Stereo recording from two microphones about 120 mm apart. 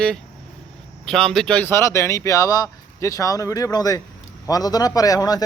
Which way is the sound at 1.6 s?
20° left (ahead or behind).